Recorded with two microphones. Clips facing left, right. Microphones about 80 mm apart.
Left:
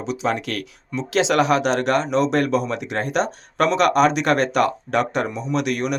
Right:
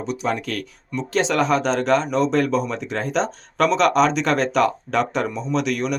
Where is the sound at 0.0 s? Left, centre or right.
Left.